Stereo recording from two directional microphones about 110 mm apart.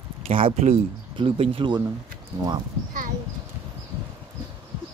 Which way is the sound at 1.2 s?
50° right (ahead or behind).